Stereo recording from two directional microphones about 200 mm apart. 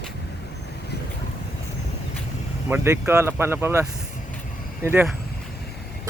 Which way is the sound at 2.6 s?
10° right (ahead or behind).